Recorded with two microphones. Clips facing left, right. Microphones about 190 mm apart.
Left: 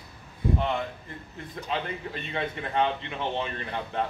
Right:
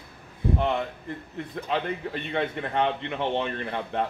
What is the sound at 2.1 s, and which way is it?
Speech, 60° right (ahead or behind).